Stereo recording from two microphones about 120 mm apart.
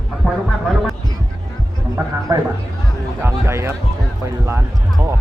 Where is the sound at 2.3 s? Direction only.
25° right (ahead or behind).